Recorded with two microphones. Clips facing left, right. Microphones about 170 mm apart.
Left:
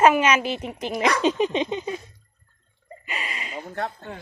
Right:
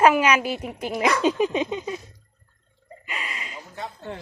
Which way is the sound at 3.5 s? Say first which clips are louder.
Left 6 dB; 60° left (ahead or behind).